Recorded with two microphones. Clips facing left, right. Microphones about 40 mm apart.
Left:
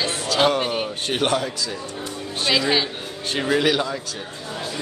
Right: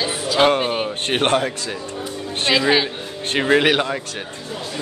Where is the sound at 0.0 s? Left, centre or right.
Centre.